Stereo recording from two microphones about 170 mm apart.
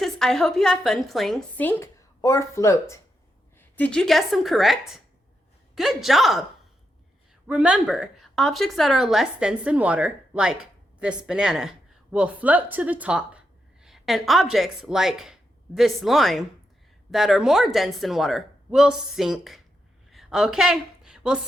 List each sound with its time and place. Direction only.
0.0 s a woman's voice: centre (ahead or behind)
1.6 s speech: 15° left (ahead or behind)
3.8 s a woman's voice: 5° left (ahead or behind)
7.4 s a woman's voice: 5° right (ahead or behind)
20.1 s a sound: centre (ahead or behind)